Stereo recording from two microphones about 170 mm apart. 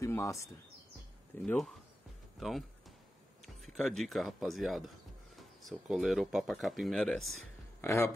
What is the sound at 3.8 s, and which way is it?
Speech, centre (ahead or behind).